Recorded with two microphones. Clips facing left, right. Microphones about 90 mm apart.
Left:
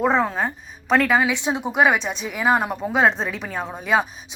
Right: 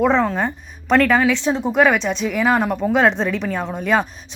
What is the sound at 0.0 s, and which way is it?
Speech, 10° left (ahead or behind).